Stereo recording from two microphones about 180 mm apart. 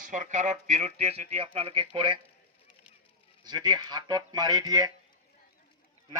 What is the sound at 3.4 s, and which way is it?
A man's voice, 25° right (ahead or behind).